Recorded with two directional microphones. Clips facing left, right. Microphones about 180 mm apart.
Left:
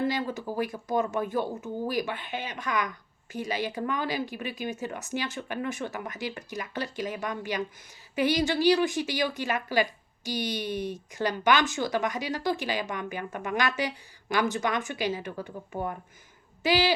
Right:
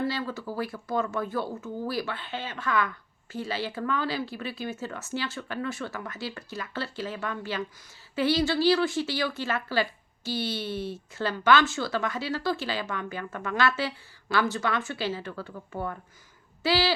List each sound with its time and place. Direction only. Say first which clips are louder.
0.0 s speech: left 1 dB; 20° left (ahead or behind)